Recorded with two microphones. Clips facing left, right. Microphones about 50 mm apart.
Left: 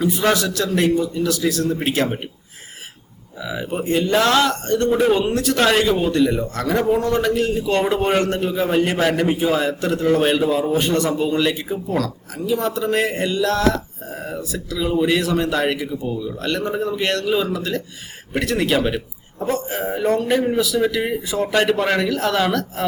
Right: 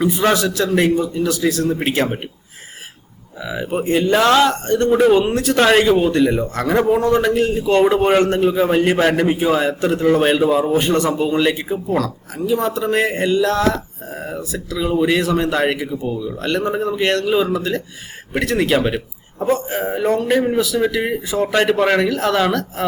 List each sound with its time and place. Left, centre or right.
0.0 s a man's voice: centre
3.4 s a man's voice: centre